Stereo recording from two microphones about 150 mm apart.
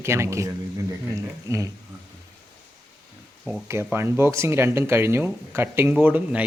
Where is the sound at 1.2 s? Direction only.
20° right (ahead or behind).